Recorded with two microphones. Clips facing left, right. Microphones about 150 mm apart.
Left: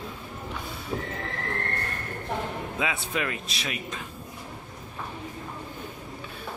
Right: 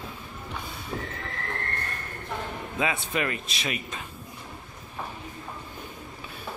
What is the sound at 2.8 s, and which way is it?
A man's voice, centre (ahead or behind).